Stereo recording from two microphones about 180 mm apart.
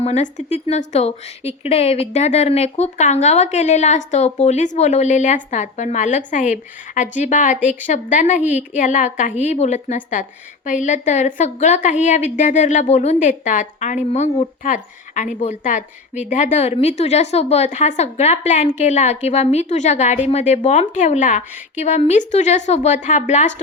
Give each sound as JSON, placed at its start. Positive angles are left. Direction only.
{"t": 0.0, "sound": "a woman's voice", "side_deg": 40}